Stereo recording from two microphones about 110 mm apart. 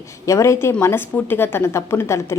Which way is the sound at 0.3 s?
25° left (ahead or behind).